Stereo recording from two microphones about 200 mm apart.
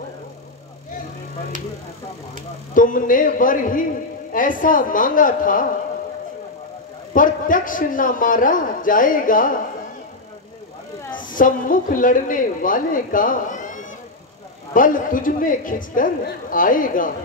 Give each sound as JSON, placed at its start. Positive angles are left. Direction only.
{"t": 2.7, "sound": "speech", "side_deg": 40}
{"t": 7.2, "sound": "speech", "side_deg": 40}
{"t": 11.2, "sound": "speech", "side_deg": 40}